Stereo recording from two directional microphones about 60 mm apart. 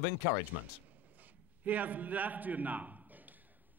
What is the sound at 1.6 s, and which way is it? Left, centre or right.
A man's voice, right.